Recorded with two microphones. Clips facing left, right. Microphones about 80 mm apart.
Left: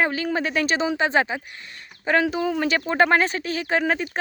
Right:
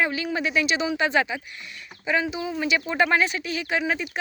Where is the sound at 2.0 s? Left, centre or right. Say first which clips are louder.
Left 4 dB; left.